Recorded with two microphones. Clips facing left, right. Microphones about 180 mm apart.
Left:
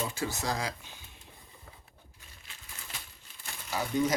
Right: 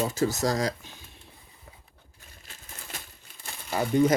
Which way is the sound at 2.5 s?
40° right (ahead or behind).